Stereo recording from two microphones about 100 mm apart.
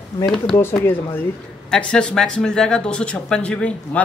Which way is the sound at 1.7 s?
5° left (ahead or behind).